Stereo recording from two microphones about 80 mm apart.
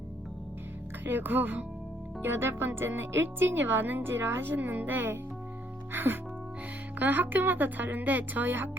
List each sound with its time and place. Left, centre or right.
1.0 s speech: right